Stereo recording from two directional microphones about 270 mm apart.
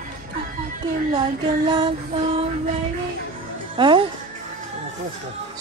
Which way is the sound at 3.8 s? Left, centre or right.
Centre.